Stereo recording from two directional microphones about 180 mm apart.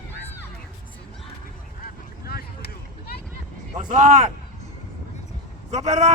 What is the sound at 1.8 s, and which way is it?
Vehicle, 60° left (ahead or behind).